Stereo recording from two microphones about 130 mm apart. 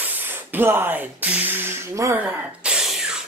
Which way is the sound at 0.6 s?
15° right (ahead or behind).